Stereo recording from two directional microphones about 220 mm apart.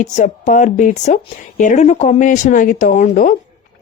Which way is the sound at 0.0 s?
35° left (ahead or behind).